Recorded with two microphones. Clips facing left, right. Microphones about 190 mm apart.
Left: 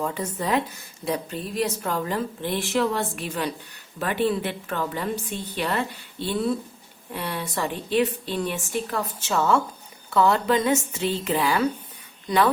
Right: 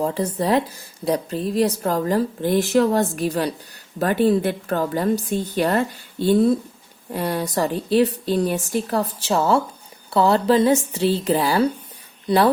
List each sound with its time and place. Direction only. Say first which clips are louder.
0.0 s a woman's voice: right 6 dB; 35° right (ahead or behind)